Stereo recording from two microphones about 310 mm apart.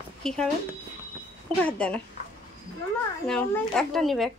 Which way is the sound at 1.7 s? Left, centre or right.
Centre.